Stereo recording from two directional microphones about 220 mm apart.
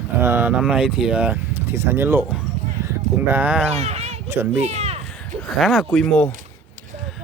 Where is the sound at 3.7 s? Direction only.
30° right (ahead or behind).